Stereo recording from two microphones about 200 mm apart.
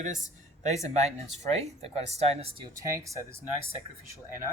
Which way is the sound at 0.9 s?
30° right (ahead or behind).